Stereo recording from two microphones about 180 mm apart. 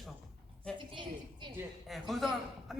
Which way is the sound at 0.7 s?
25° right (ahead or behind).